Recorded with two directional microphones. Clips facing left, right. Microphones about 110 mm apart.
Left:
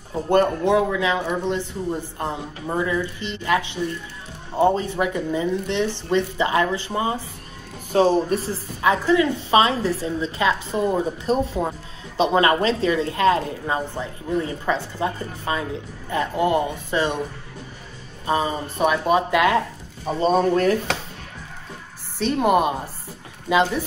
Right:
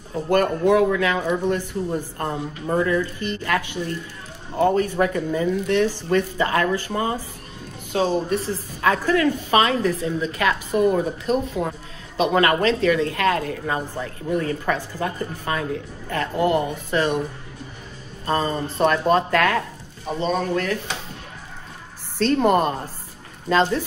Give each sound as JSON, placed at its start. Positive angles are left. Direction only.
{"t": 0.3, "sound": "speech", "side_deg": 25}
{"t": 7.9, "sound": "speech", "side_deg": 40}
{"t": 8.8, "sound": "speech", "side_deg": 20}
{"t": 18.2, "sound": "speech", "side_deg": 10}
{"t": 20.2, "sound": "speech", "side_deg": 40}
{"t": 22.2, "sound": "speech", "side_deg": 5}